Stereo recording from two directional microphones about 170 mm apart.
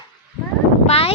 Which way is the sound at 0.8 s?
35° left (ahead or behind).